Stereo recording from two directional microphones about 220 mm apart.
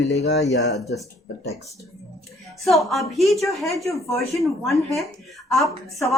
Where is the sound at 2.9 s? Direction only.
Centre (ahead or behind).